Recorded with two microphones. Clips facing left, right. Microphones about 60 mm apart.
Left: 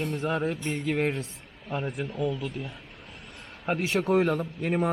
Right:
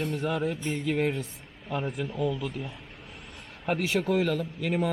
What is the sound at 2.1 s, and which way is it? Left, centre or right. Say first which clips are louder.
Speech: even; right.